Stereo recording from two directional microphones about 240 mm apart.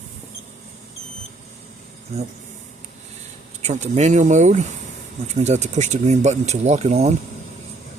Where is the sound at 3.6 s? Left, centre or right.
Right.